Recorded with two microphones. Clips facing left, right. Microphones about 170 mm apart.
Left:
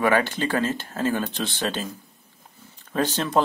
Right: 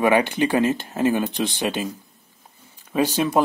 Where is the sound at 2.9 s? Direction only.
10° right (ahead or behind).